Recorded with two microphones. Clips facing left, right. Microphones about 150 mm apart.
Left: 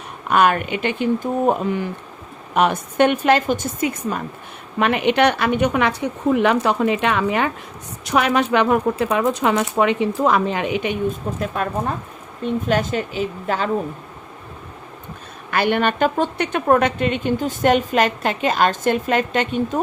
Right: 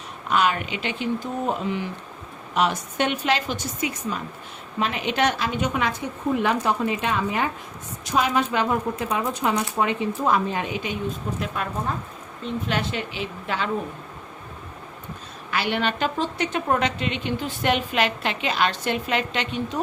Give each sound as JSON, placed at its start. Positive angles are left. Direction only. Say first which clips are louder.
{"t": 0.3, "sound": "a woman's voice", "louder": "left 6 dB", "side_deg": 55}
{"t": 4.8, "sound": "speech", "louder": "left 7 dB", "side_deg": 65}
{"t": 11.3, "sound": "a woman's voice", "louder": "left 5 dB", "side_deg": 45}
{"t": 15.4, "sound": "a woman's voice", "louder": "left 6 dB", "side_deg": 50}